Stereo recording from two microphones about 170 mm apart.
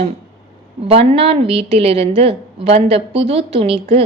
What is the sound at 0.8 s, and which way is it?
A woman's voice, 35° right (ahead or behind).